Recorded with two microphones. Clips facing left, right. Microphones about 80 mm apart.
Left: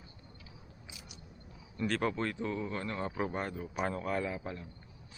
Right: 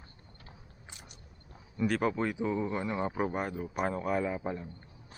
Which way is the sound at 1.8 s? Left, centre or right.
Centre.